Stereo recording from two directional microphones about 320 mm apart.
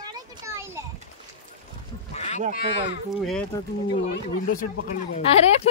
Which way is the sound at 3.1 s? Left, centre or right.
Centre.